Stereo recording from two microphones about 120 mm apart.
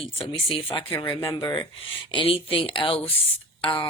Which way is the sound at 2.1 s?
50° left (ahead or behind).